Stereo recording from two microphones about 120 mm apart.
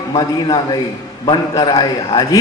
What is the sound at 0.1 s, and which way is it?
A man's voice, 35° left (ahead or behind).